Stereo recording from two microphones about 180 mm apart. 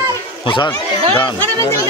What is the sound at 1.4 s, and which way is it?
Speech, 15° left (ahead or behind).